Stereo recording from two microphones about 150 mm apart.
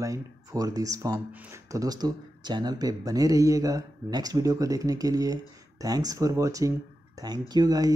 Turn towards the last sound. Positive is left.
turn(degrees=-25)  # may be behind; listen again after turning